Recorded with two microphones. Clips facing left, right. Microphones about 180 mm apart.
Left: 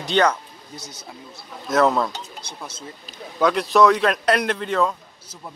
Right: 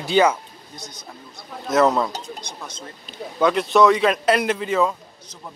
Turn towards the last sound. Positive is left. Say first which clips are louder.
# right 1 dB
turn(degrees=-5)  # may be behind; listen again after turning